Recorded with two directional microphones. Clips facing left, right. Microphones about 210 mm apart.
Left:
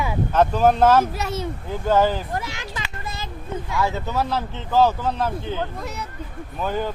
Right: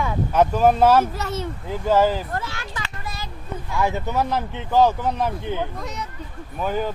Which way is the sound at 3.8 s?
15° right (ahead or behind).